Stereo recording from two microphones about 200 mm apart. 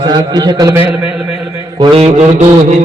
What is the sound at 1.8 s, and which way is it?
Speech, 25° right (ahead or behind).